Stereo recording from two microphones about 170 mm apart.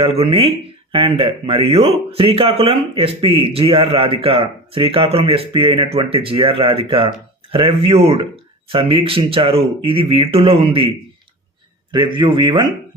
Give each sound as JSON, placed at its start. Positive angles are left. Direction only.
{"t": 0.0, "sound": "speech", "side_deg": -35}
{"t": 11.9, "sound": "a man's voice", "side_deg": -25}